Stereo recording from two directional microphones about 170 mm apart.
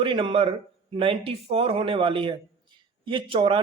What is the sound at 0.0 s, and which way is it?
A man's voice, 30° right (ahead or behind).